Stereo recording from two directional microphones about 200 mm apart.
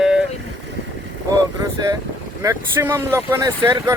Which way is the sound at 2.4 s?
15° right (ahead or behind).